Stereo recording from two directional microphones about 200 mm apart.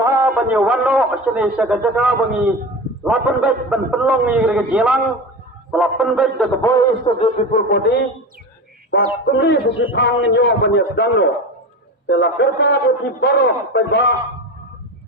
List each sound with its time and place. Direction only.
0.0 s a man's voice: 10° right (ahead or behind)
6.6 s a man's voice: 15° left (ahead or behind)
7.1 s a man's voice: 30° left (ahead or behind)
7.5 s speech: 45° left (ahead or behind)
9.2 s a man's voice: 60° left (ahead or behind)